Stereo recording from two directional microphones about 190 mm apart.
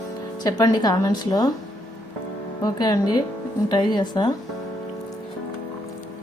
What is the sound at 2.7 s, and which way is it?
Speech, 20° left (ahead or behind).